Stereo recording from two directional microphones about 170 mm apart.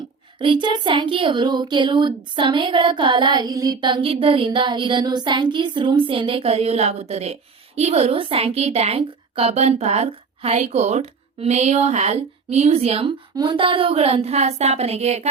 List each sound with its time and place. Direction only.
0.3 s a woman's voice: 30° right (ahead or behind)